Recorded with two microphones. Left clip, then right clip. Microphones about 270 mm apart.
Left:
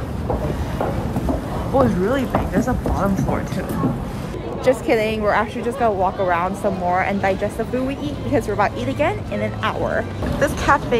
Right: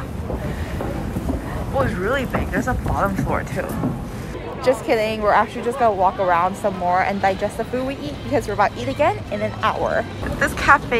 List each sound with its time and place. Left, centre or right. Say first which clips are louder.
1.8 s speech: left 3 dB; centre
4.6 s a woman's voice: left 1 dB; centre